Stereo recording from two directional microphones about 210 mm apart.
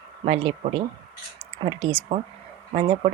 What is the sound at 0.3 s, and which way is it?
Speech, 30° right (ahead or behind).